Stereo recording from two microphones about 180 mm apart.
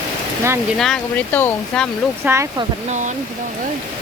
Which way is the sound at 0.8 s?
5° left (ahead or behind).